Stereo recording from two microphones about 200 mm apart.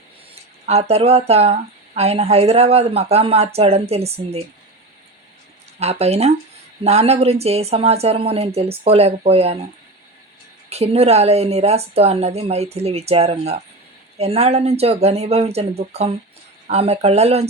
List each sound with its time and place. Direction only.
0.6 s speech: 30° right (ahead or behind)
5.8 s speech: 30° right (ahead or behind)
10.7 s speech: 30° right (ahead or behind)